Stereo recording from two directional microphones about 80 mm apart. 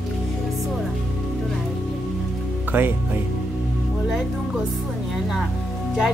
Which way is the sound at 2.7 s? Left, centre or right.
Right.